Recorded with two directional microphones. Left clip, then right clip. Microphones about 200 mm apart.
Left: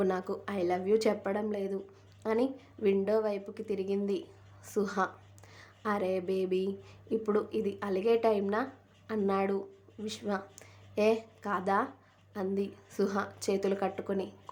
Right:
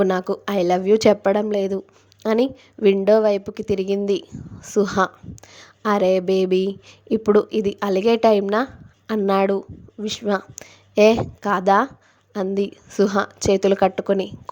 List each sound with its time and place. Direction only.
0.0 s a woman's voice: 40° right (ahead or behind)